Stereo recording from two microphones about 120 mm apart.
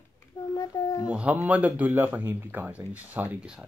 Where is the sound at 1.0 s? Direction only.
10° right (ahead or behind).